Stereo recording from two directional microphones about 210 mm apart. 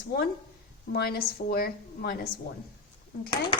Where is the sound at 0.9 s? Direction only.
50° left (ahead or behind).